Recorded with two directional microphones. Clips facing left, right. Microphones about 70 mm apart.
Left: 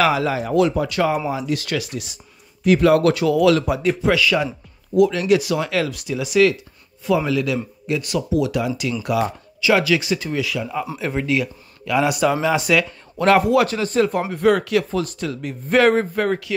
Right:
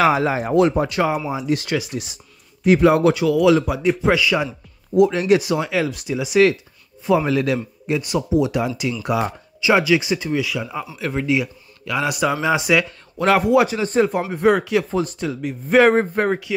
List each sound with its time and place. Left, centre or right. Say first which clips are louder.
0.0 s speech: right 1 dB; right
3.1 s a man's voice: right 1 dB; centre
4.0 s speech: even; centre
4.9 s a man's voice: right 1 dB; right
5.6 s speech: even; centre
5.9 s speech: right 1 dB; right
7.2 s a man's voice: right 1 dB; right
8.0 s speech: right 2 dB; right
11.0 s a man's voice: right 2 dB; centre
11.2 s a man's voice: right 1 dB; centre
15.9 s speech: right 1 dB; right